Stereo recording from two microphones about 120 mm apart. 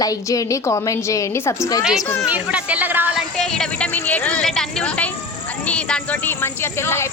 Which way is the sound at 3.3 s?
5° left (ahead or behind).